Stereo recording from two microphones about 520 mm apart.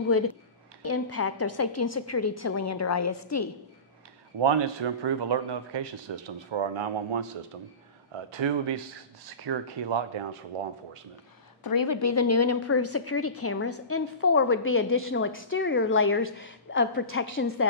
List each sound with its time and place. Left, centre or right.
0.8 s a woman's voice: left
4.4 s speech: right
10.5 s speech: right
11.6 s a woman's voice: left